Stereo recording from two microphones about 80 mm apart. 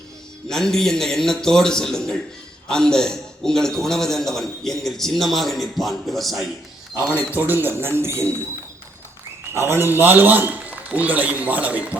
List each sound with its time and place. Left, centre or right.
0.4 s a man's voice: centre
7.3 s speech: right
9.6 s a man's voice: right